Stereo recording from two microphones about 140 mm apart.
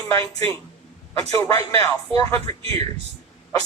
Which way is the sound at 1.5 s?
25° left (ahead or behind).